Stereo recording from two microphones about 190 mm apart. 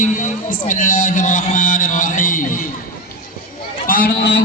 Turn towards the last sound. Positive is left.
turn(degrees=55)  # may be behind; listen again after turning